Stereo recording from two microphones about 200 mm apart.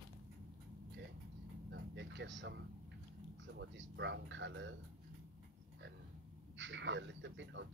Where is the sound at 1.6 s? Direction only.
60° right (ahead or behind).